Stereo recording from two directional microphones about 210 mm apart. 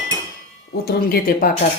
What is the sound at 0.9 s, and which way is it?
Speech, 45° left (ahead or behind).